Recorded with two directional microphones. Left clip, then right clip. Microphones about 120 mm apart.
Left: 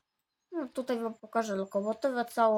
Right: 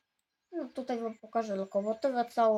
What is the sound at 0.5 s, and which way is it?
A woman's voice, 40° left (ahead or behind).